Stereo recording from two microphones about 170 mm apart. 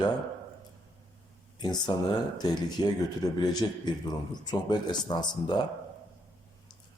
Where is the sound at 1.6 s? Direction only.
25° left (ahead or behind).